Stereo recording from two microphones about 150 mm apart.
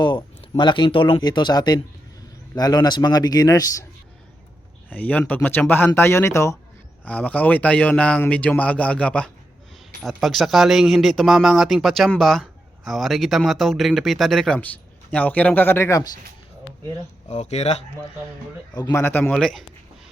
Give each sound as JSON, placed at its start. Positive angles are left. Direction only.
{"t": 0.0, "sound": "a man's voice", "side_deg": 30}
{"t": 4.9, "sound": "speech", "side_deg": 10}
{"t": 17.2, "sound": "speech", "side_deg": 50}
{"t": 18.7, "sound": "a man's voice", "side_deg": 25}
{"t": 19.0, "sound": "speech", "side_deg": 15}
{"t": 19.3, "sound": "speech", "side_deg": 0}